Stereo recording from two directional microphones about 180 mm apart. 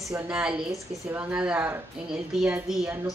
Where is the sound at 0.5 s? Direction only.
15° right (ahead or behind).